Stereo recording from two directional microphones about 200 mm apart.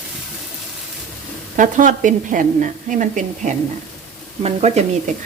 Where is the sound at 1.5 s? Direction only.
40° right (ahead or behind).